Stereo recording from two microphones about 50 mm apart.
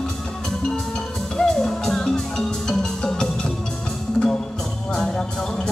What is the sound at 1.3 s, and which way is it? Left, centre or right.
Music, centre.